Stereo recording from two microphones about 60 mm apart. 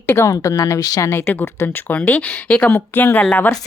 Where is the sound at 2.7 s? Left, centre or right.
Left.